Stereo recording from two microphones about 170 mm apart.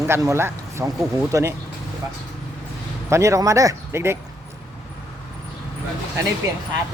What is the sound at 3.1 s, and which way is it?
Speech, 20° right (ahead or behind).